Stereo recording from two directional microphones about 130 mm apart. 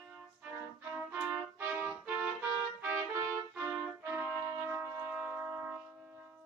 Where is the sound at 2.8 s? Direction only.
15° right (ahead or behind).